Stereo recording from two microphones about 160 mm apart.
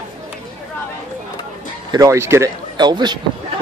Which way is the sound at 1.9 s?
20° right (ahead or behind).